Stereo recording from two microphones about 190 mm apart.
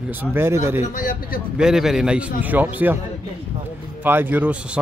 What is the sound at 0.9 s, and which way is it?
Speech, 50° left (ahead or behind).